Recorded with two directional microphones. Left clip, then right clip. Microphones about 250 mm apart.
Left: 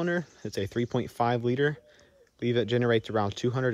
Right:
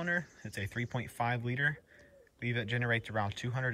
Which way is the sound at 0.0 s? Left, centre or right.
Centre.